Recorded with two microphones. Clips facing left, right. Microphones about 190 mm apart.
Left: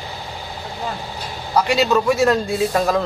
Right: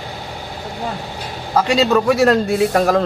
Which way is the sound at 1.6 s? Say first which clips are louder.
Right 2 dB; 55° right (ahead or behind).